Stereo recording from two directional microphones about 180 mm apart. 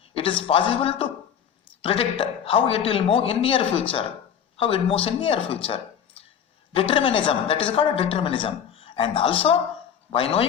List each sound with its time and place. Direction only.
0.1 s speech: 30° left (ahead or behind)
5.6 s a sound: 30° left (ahead or behind)
6.7 s speech: 30° left (ahead or behind)